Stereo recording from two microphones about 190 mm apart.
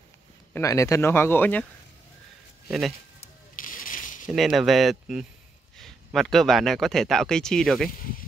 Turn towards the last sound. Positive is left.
turn(degrees=0)  # may be behind; listen again after turning